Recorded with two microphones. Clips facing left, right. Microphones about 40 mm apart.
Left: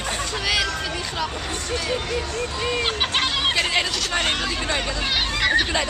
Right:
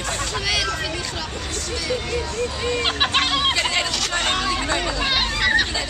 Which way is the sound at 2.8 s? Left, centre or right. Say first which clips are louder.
Right 4 dB; right.